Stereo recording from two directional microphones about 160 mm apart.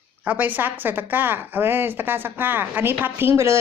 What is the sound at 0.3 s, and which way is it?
A woman's voice, 10° right (ahead or behind).